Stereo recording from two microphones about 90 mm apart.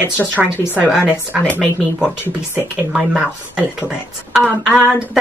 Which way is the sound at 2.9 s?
10° right (ahead or behind).